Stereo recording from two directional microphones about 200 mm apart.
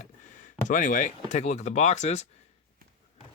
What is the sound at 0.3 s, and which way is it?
Speech, 40° left (ahead or behind).